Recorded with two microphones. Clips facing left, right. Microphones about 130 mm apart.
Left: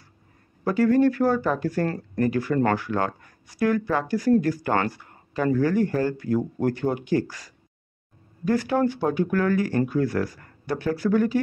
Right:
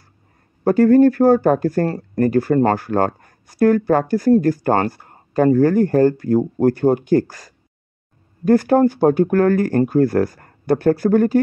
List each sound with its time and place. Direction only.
0.7 s speech: 45° right (ahead or behind)